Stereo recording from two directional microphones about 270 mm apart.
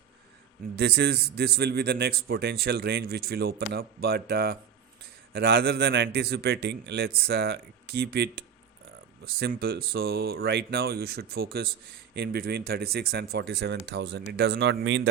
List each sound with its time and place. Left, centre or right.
0.8 s a man's voice: right